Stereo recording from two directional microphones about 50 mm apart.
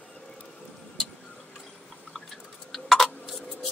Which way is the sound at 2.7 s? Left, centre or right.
Centre.